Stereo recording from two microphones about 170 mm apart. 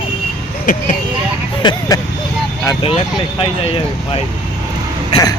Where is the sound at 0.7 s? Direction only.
50° left (ahead or behind).